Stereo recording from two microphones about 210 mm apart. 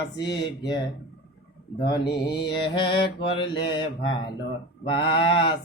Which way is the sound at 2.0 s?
50° left (ahead or behind).